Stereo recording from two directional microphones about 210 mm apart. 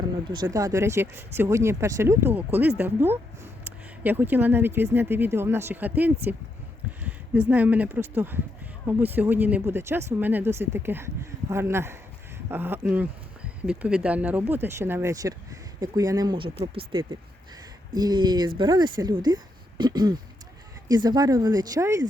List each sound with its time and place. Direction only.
0.3 s speech: 20° right (ahead or behind)